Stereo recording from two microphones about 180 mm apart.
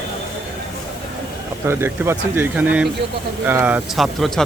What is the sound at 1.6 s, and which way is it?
Speech, 15° right (ahead or behind).